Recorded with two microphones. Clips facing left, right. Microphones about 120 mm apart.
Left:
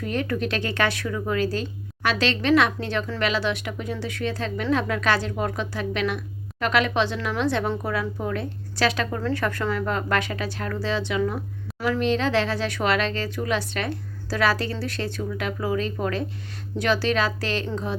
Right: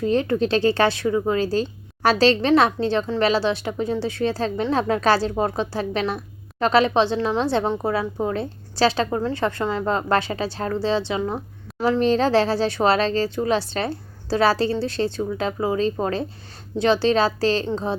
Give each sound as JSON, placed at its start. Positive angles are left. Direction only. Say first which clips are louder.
{"t": 0.0, "sound": "speech", "louder": "right 6 dB", "side_deg": -30}